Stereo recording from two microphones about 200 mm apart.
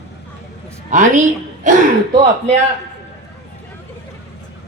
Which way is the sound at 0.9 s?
40° right (ahead or behind).